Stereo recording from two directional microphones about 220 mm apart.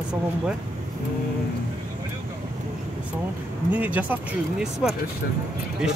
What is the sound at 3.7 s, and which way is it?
Speech, 5° right (ahead or behind).